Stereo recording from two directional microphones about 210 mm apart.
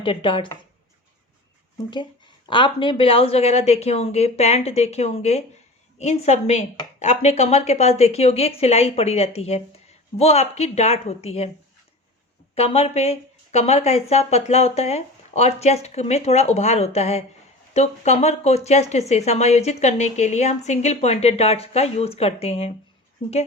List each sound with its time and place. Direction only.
0.0 s a woman's voice: 25° left (ahead or behind)
2.5 s a woman's voice: 25° left (ahead or behind)
12.5 s speech: 30° left (ahead or behind)